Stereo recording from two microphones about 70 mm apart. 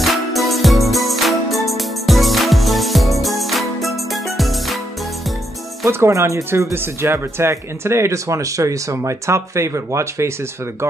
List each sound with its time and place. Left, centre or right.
0.0 s music: centre
5.9 s speech: right